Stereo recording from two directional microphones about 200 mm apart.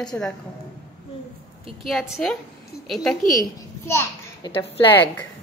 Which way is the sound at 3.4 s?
15° left (ahead or behind).